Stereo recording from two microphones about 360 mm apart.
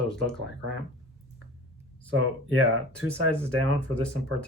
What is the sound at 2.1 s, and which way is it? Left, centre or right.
Speech, right.